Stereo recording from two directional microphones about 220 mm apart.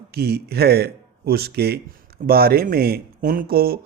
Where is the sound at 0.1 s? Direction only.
45° right (ahead or behind).